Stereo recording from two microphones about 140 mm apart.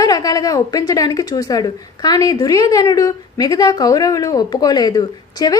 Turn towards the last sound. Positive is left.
turn(degrees=25)  # may be behind; listen again after turning